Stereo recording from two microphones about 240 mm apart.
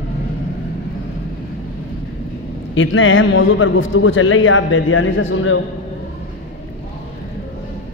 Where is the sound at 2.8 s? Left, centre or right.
Left.